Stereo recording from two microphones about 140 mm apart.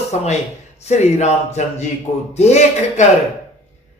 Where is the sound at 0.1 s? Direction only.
55° left (ahead or behind).